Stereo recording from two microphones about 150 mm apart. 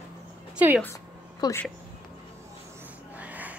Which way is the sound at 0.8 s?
20° left (ahead or behind).